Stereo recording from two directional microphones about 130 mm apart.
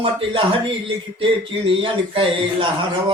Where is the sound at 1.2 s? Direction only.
45° right (ahead or behind).